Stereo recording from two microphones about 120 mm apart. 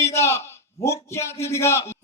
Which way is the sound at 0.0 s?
20° left (ahead or behind).